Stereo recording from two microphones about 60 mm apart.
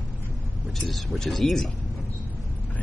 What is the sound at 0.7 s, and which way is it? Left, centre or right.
Speech, centre.